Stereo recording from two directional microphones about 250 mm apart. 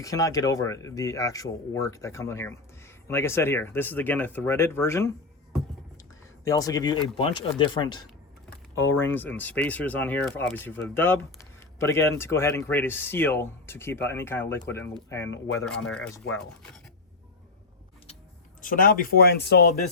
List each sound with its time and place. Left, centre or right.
0.0 s speech: centre
6.4 s speech: centre
8.7 s speech: left
9.0 s speech: centre
18.6 s speech: left